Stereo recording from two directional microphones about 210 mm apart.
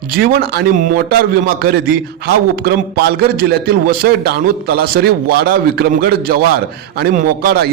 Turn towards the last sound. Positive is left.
turn(degrees=-45)  # may be behind; listen again after turning